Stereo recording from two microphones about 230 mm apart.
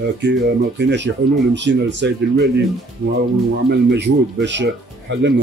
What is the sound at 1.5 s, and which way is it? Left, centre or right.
Speech, right.